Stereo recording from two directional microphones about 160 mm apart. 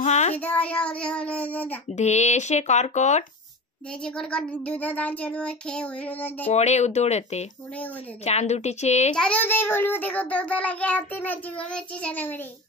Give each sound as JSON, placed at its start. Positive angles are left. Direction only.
{"t": 0.0, "sound": "speech", "side_deg": 45}
{"t": 0.4, "sound": "a child's voice", "side_deg": 10}
{"t": 2.0, "sound": "speech", "side_deg": 45}
{"t": 4.0, "sound": "a child's voice", "side_deg": 5}
{"t": 6.4, "sound": "speech", "side_deg": 45}
{"t": 9.1, "sound": "a child's voice", "side_deg": 5}